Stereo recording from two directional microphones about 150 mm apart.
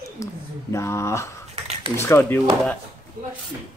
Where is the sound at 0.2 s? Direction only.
20° left (ahead or behind).